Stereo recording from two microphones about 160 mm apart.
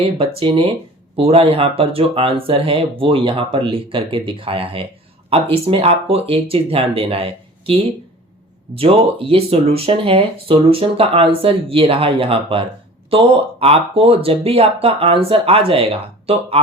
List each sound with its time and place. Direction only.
0.0 s speech: 35° right (ahead or behind)